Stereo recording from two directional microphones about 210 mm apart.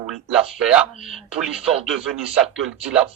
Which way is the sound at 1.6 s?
30° right (ahead or behind).